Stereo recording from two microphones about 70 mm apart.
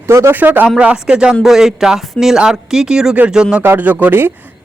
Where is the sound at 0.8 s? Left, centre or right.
Centre.